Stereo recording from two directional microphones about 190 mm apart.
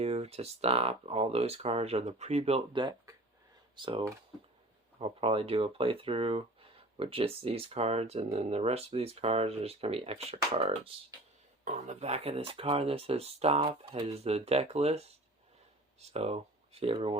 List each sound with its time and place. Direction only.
0.0 s speech: 35° right (ahead or behind)
11.6 s speech: 35° right (ahead or behind)